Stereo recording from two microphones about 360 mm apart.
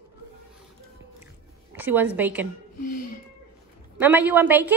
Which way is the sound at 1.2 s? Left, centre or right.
Centre.